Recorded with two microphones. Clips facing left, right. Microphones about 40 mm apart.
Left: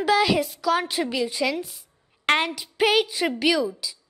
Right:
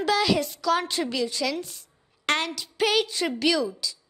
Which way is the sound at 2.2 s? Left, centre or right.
Left.